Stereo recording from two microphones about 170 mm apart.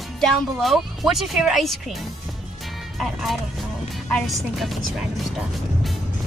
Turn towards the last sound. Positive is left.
turn(degrees=0)  # may be behind; listen again after turning